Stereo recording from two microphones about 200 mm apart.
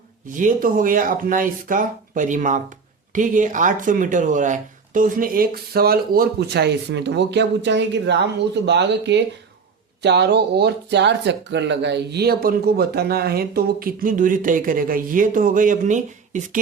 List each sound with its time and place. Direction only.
0.3 s speech: 40° right (ahead or behind)